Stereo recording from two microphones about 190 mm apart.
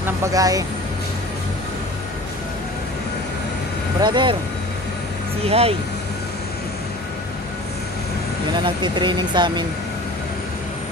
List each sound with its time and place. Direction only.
0.0 s speech: 15° right (ahead or behind)
4.0 s speech: 25° right (ahead or behind)
5.4 s speech: 30° right (ahead or behind)
8.6 s speech: 25° right (ahead or behind)